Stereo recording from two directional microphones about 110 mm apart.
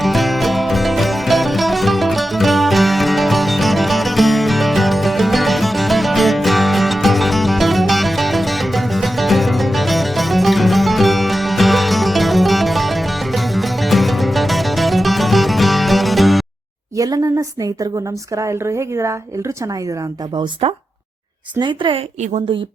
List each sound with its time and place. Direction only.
0.0 s music: centre (ahead or behind)
17.0 s speech: 35° right (ahead or behind)
18.4 s a woman's voice: 25° right (ahead or behind)
21.6 s a woman's voice: 45° right (ahead or behind)